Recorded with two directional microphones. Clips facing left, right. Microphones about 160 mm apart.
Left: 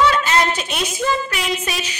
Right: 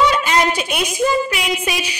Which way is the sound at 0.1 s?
10° right (ahead or behind).